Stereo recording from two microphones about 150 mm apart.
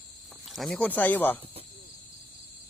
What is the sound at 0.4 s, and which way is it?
Speech, centre (ahead or behind).